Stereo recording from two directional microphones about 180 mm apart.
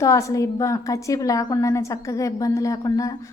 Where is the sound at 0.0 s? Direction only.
15° left (ahead or behind).